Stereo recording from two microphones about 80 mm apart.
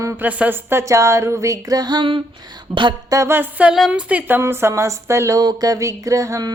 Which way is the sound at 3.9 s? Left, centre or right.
Centre.